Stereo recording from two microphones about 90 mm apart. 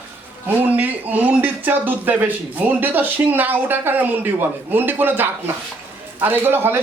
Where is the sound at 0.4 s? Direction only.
20° right (ahead or behind).